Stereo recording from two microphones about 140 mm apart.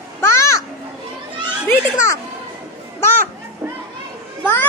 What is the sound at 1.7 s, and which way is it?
Speech, 20° left (ahead or behind).